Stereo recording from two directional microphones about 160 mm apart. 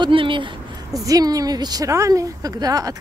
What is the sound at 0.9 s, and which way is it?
A woman's voice, 20° right (ahead or behind).